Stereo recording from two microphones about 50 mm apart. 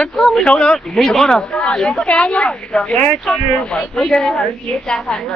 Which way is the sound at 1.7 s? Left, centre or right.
Centre.